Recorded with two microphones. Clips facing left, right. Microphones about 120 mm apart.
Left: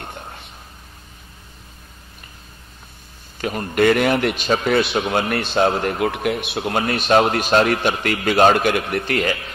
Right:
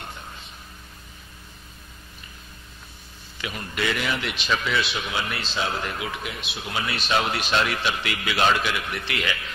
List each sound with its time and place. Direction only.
3.3 s speech: 45° left (ahead or behind)